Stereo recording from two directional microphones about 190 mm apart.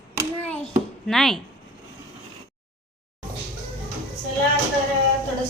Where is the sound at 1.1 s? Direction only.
Centre (ahead or behind).